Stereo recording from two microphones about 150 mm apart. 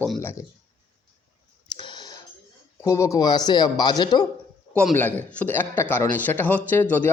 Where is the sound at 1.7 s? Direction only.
30° left (ahead or behind).